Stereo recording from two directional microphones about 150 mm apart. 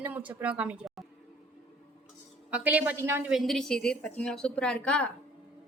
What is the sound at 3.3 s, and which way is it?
A woman's voice, centre (ahead or behind).